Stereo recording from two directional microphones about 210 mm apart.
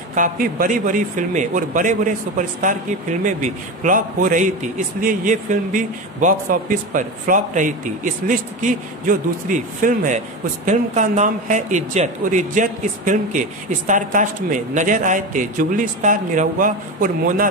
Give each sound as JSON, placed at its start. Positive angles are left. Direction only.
{"t": 0.1, "sound": "a man's voice", "side_deg": -40}